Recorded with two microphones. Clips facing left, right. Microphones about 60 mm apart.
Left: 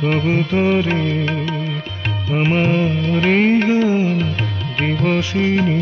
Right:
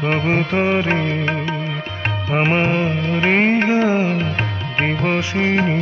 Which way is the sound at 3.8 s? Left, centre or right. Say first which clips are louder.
Left 1 dB; right.